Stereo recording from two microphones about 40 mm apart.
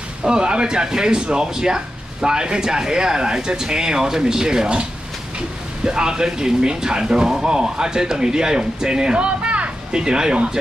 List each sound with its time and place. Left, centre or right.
0.2 s speech: centre
5.9 s speech: centre
9.9 s speech: centre